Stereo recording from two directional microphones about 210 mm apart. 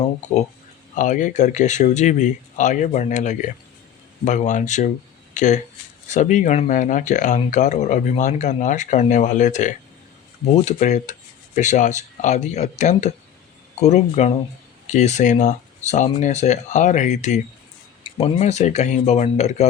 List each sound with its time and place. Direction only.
0.9 s speech: 35° left (ahead or behind)